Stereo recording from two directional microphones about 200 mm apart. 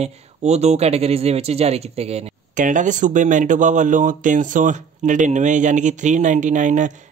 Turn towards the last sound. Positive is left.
turn(degrees=-40)  # may be behind; listen again after turning